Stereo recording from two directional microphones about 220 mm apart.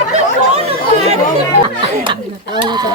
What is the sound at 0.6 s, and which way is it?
Chatter, 30° right (ahead or behind).